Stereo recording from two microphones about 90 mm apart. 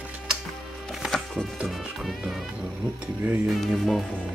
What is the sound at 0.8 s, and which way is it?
Music, centre (ahead or behind).